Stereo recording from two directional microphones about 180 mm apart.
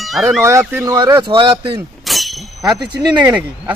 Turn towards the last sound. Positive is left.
turn(degrees=-5)  # may be behind; listen again after turning